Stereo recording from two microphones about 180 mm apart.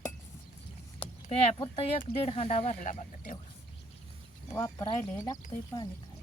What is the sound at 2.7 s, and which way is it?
Speech, 50° left (ahead or behind).